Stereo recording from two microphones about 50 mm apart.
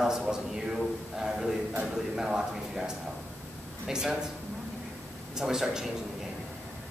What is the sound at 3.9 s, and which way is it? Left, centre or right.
Speech, centre.